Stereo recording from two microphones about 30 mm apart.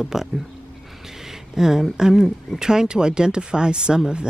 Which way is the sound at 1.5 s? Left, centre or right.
Centre.